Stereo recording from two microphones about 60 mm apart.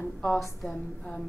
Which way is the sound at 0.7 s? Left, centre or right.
Centre.